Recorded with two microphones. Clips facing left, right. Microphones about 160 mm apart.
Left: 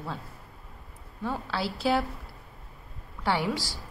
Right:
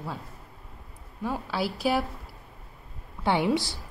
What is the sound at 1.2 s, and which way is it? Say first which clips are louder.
Speech: right 2 dB; 15° right (ahead or behind).